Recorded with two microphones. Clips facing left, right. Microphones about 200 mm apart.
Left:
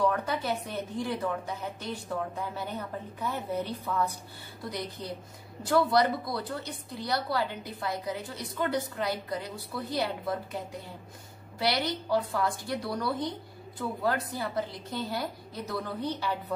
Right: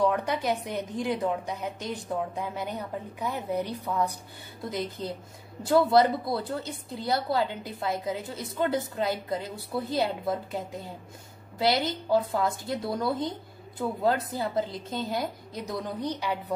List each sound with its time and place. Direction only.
0.0 s a woman's voice: 15° right (ahead or behind)